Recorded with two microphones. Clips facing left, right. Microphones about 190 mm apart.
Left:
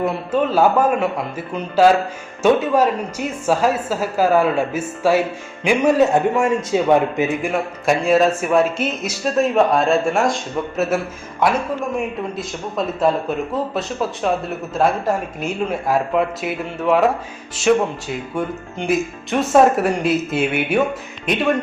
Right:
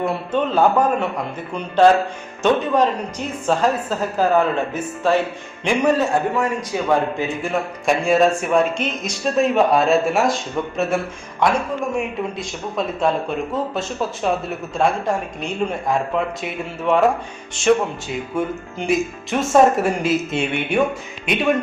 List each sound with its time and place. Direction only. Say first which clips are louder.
0.0 s a woman's voice: left 2 dB; centre (ahead or behind)
6.1 s a man's voice: left 3 dB; 25° left (ahead or behind)
7.5 s speech: left 1 dB; centre (ahead or behind)